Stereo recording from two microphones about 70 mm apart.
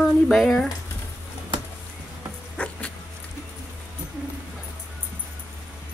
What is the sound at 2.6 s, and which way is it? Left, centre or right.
Dog, centre.